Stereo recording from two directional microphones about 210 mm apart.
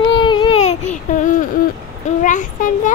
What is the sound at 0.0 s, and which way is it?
Baby cry, 25° left (ahead or behind).